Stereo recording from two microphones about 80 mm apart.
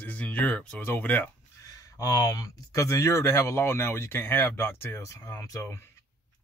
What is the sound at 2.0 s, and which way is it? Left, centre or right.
Speech, left.